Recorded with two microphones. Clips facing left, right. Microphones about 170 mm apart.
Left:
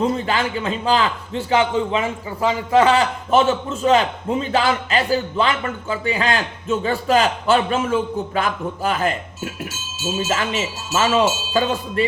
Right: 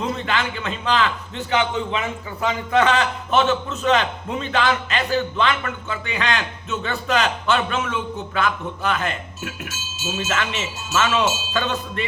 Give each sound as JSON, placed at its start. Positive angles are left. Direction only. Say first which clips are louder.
{"t": 0.3, "sound": "a man's voice", "louder": "left 3 dB", "side_deg": 35}